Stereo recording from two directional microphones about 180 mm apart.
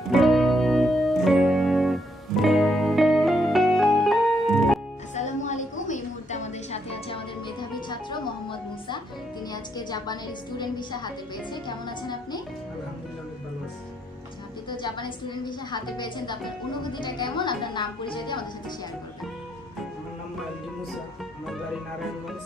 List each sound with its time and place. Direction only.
0.1 s music: centre (ahead or behind)
5.1 s a sound: 40° left (ahead or behind)
7.9 s music: 25° left (ahead or behind)
14.7 s a woman's voice: 25° left (ahead or behind)